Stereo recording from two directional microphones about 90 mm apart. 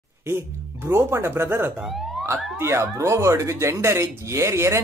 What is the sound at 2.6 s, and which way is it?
Speech, 30° right (ahead or behind).